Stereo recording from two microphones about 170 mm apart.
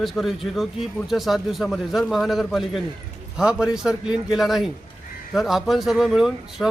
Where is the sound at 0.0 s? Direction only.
Centre (ahead or behind).